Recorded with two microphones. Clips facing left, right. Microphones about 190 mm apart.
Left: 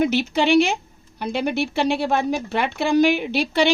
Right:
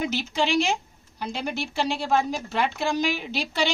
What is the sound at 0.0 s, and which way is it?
A woman's voice, 65° left (ahead or behind).